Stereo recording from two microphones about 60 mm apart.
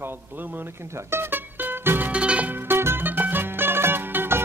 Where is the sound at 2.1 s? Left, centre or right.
Centre.